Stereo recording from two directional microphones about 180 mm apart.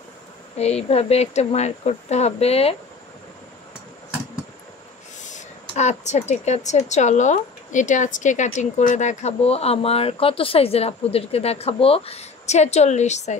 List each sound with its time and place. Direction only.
0.6 s a woman's voice: 35° left (ahead or behind)
5.3 s a woman's voice: 40° left (ahead or behind)